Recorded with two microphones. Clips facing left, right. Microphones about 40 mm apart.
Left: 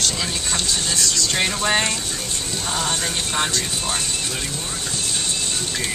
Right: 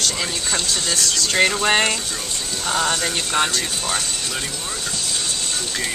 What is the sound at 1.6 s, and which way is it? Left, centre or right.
Speech, right.